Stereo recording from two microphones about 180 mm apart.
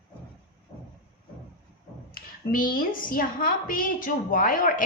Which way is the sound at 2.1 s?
50° left (ahead or behind).